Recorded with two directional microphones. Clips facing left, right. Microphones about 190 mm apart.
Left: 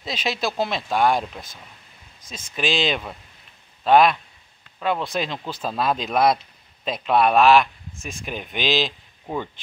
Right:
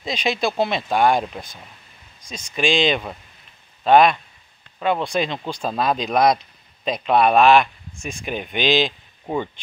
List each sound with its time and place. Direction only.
0.0 s a man's voice: centre (ahead or behind)
9.2 s speech: 15° right (ahead or behind)